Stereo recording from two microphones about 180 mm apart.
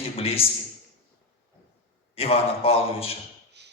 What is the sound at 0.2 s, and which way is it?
Speech, 30° left (ahead or behind).